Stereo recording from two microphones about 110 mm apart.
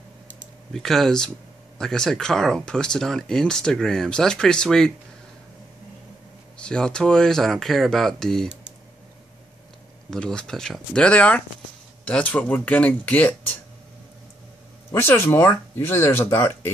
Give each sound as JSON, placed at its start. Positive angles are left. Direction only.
{"t": 0.7, "sound": "speech", "side_deg": 5}
{"t": 6.6, "sound": "speech", "side_deg": 5}
{"t": 10.1, "sound": "speech", "side_deg": 5}
{"t": 14.9, "sound": "speech", "side_deg": 20}